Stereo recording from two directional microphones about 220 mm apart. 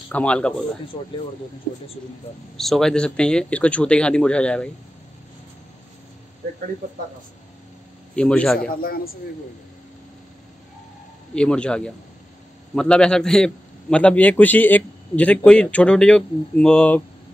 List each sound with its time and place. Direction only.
0.1 s a man's voice: 5° left (ahead or behind)
2.5 s a man's voice: centre (ahead or behind)
8.2 s a man's voice: 5° left (ahead or behind)
8.5 s a man's voice: 40° left (ahead or behind)
11.3 s a man's voice: 5° left (ahead or behind)